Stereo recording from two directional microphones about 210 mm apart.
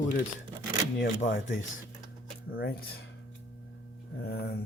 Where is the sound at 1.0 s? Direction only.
40° left (ahead or behind).